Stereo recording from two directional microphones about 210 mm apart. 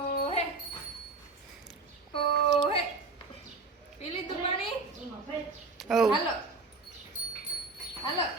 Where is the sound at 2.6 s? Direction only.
25° left (ahead or behind).